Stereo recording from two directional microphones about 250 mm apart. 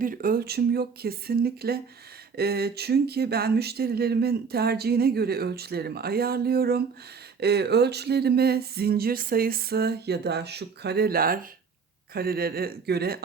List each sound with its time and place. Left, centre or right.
0.0 s speech: right